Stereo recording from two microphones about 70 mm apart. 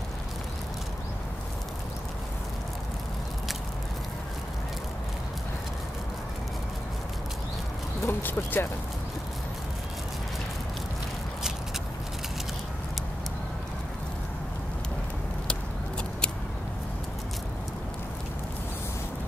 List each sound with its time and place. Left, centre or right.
8.0 s speech: left